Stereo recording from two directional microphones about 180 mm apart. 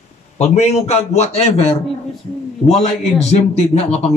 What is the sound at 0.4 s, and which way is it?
A man's voice, 35° left (ahead or behind).